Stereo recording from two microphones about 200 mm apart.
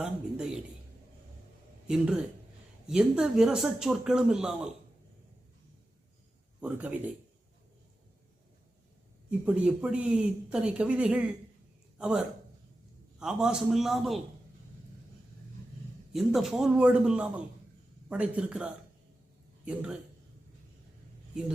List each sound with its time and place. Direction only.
0.0 s speech: 5° right (ahead or behind)
1.9 s speech: 5° right (ahead or behind)
6.6 s speech: 5° right (ahead or behind)
9.6 s a man's voice: 5° right (ahead or behind)
16.1 s speech: centre (ahead or behind)